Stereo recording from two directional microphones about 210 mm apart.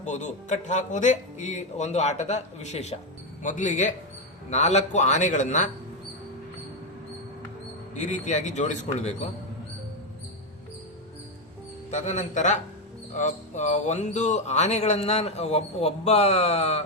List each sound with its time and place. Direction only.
0.0 s speech: 35° left (ahead or behind)
7.9 s speech: 35° left (ahead or behind)
11.9 s speech: 35° left (ahead or behind)